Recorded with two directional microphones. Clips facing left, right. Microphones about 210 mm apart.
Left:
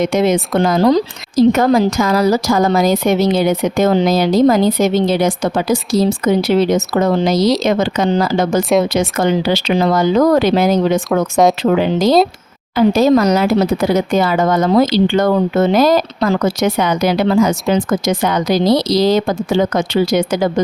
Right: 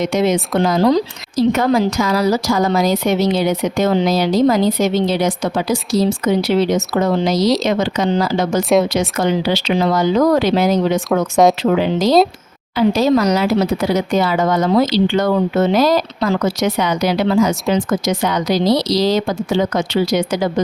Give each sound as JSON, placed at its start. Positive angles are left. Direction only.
{"t": 0.0, "sound": "a woman's voice", "side_deg": 50}
{"t": 11.1, "sound": "speech", "side_deg": 0}
{"t": 11.8, "sound": "a woman's voice", "side_deg": 50}